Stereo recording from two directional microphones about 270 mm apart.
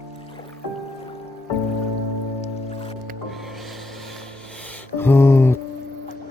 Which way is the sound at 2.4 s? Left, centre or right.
Left.